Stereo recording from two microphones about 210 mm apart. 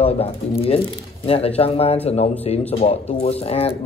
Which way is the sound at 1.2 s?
25° left (ahead or behind).